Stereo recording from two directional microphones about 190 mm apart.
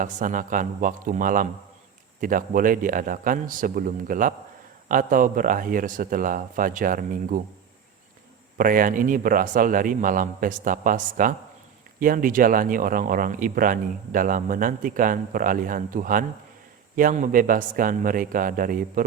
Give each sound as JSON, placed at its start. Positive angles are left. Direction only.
{"t": 0.0, "sound": "speech", "side_deg": -45}
{"t": 8.5, "sound": "speech", "side_deg": -45}